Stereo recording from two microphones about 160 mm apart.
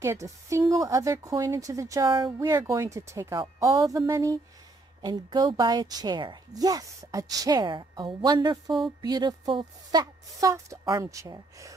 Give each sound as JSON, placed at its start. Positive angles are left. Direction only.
{"t": 0.0, "sound": "a woman's voice", "side_deg": -20}